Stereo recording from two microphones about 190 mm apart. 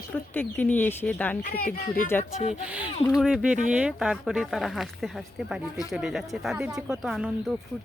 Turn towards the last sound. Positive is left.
turn(degrees=0)  # may be behind; listen again after turning